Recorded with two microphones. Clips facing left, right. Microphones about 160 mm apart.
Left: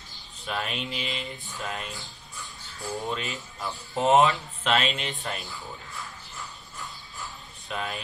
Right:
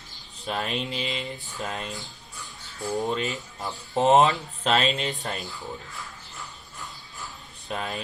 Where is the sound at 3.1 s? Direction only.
40° right (ahead or behind).